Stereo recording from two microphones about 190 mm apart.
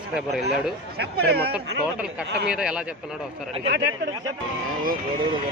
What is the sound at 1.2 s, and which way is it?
Speech, 55° right (ahead or behind).